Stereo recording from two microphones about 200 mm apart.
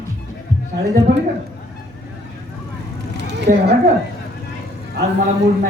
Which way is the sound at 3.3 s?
60° right (ahead or behind).